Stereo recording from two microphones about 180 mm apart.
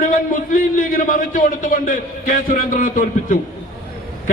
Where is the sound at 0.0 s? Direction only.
45° left (ahead or behind).